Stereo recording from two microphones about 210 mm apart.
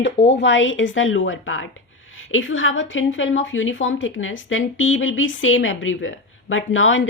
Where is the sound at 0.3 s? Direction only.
60° left (ahead or behind).